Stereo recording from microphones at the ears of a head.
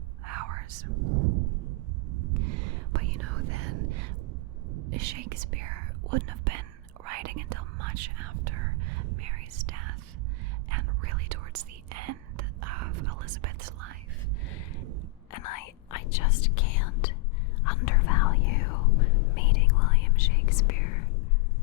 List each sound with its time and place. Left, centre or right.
0.3 s whispering: right
15.3 s whispering: left